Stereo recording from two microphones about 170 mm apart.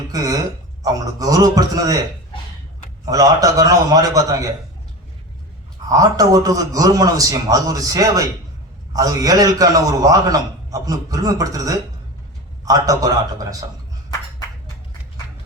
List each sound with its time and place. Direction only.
0.1 s a man's voice: 20° right (ahead or behind)
3.1 s a man's voice: 20° right (ahead or behind)
5.9 s a man's voice: 20° right (ahead or behind)